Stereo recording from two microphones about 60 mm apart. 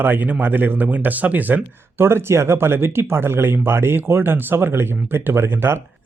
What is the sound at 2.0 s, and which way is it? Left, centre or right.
Speech, right.